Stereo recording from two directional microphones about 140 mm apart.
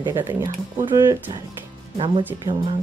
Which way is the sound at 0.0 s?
15° right (ahead or behind).